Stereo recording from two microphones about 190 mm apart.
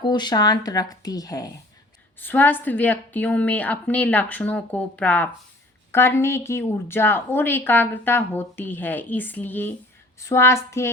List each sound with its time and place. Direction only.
0.0 s a woman's voice: 20° left (ahead or behind)